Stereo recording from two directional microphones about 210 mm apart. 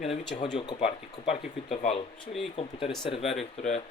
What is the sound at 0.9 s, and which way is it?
Speech, 30° left (ahead or behind).